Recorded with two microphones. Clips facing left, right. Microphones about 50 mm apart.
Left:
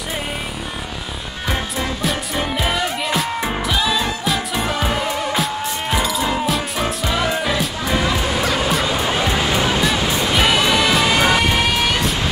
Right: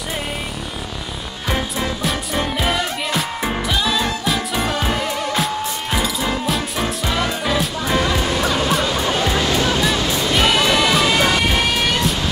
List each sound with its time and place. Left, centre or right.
2.0 s music: centre
9.3 s music: centre